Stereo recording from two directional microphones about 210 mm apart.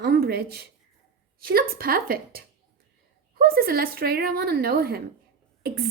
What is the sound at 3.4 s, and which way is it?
A woman's voice, 45° right (ahead or behind).